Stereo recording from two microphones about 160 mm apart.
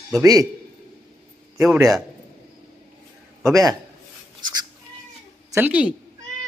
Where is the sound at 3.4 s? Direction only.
20° right (ahead or behind).